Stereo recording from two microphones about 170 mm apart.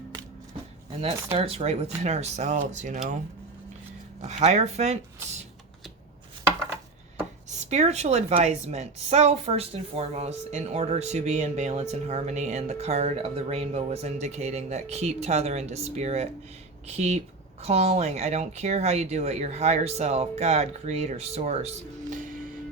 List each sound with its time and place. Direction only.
0.9 s a woman's voice: 35° right (ahead or behind)
4.2 s a woman's voice: 40° right (ahead or behind)
7.6 s a woman's voice: 40° right (ahead or behind)
17.6 s a woman's voice: 40° right (ahead or behind)